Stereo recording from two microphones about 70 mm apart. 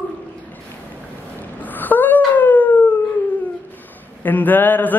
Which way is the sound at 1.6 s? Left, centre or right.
Left.